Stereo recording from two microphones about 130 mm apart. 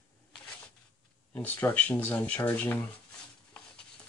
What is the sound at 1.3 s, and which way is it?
Speech, 10° left (ahead or behind).